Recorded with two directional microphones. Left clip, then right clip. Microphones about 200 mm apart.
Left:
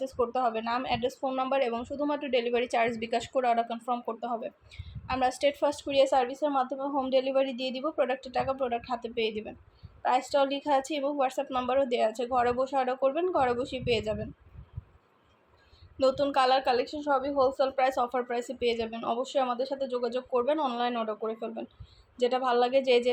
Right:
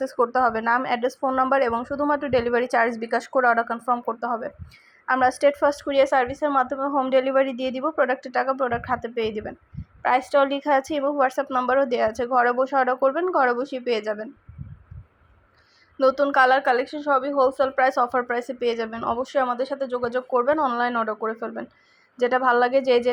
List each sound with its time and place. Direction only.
0.3 s a woman's voice: 25° right (ahead or behind)
16.0 s a woman's voice: 20° right (ahead or behind)